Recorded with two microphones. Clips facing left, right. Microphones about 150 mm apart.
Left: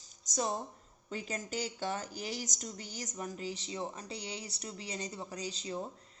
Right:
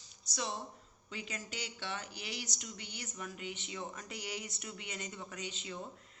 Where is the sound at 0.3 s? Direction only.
45° left (ahead or behind).